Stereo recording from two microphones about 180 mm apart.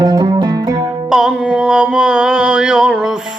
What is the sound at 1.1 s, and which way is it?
Mantra, 5° right (ahead or behind).